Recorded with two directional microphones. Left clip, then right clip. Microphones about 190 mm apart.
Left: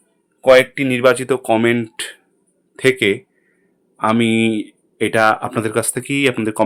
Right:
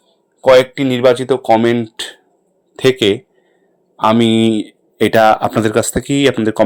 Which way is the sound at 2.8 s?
20° right (ahead or behind).